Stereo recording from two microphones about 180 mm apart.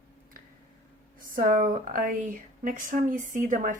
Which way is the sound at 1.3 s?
50° right (ahead or behind).